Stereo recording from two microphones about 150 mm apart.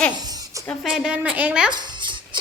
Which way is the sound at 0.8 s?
5° right (ahead or behind).